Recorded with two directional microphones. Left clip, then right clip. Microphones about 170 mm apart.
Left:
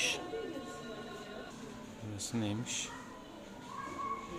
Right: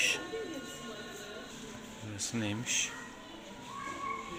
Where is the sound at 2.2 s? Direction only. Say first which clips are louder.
Right 2 dB; 5° left (ahead or behind).